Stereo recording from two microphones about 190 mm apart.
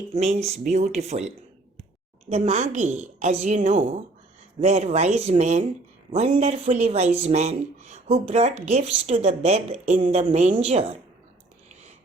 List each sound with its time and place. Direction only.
0.1 s speech: 35° right (ahead or behind)
2.3 s speech: 35° right (ahead or behind)